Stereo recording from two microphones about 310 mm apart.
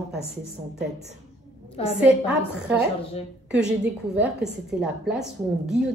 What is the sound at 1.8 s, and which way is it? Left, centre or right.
Speech, centre.